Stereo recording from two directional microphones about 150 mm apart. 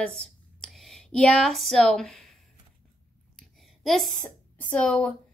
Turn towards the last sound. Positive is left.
turn(degrees=5)  # may be behind; listen again after turning